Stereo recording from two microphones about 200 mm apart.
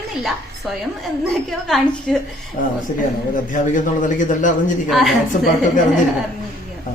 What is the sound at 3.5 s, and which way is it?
A man's voice, 40° left (ahead or behind).